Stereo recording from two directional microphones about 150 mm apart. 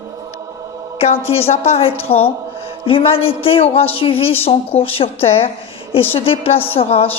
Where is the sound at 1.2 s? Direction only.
40° left (ahead or behind).